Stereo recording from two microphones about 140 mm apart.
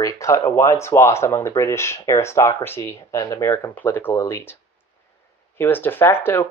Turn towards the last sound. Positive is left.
turn(degrees=15)  # may be behind; listen again after turning